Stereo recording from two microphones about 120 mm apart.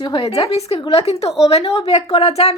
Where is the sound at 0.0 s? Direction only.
40° left (ahead or behind).